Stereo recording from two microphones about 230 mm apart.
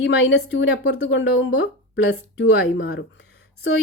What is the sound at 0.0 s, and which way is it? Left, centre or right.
A woman's voice, left.